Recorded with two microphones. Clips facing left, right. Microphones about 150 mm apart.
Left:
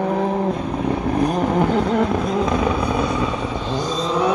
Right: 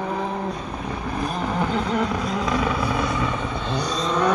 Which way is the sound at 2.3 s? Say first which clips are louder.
Left 4 dB; 25° left (ahead or behind).